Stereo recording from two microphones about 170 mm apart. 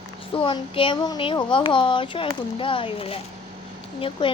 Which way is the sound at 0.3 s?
30° left (ahead or behind).